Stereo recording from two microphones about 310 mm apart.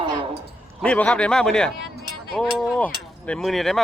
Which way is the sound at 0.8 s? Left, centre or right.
Centre.